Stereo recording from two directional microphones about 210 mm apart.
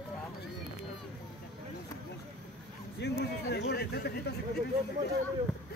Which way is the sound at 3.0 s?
50° left (ahead or behind).